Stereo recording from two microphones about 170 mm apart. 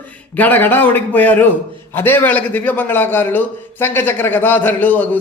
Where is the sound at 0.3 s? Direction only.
10° left (ahead or behind).